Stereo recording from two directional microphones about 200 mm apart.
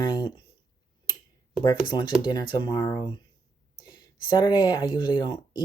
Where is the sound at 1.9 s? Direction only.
20° left (ahead or behind).